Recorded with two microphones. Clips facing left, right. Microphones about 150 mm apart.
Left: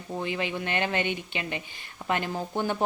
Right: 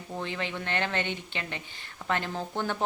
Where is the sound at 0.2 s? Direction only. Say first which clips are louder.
Left 4 dB; 15° left (ahead or behind).